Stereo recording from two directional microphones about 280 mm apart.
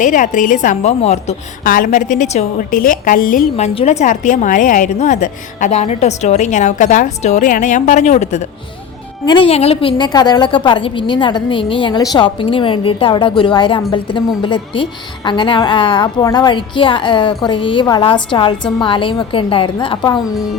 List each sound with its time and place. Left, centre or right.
0.0 s a woman's voice: left